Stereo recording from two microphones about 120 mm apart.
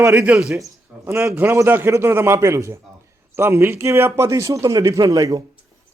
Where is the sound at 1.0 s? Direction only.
20° right (ahead or behind).